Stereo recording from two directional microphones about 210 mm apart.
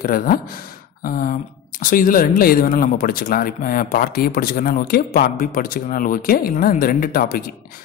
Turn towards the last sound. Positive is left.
turn(degrees=45)  # may be behind; listen again after turning